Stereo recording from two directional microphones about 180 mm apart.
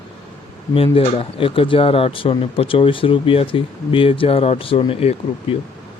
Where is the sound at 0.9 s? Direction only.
30° left (ahead or behind).